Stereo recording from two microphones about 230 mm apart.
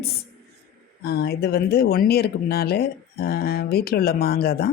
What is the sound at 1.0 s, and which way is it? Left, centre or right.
Speech, left.